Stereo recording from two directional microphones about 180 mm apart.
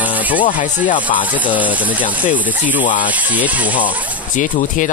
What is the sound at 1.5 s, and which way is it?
Speech, 10° right (ahead or behind).